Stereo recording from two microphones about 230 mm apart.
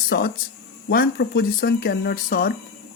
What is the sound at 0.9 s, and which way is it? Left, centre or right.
Speech, left.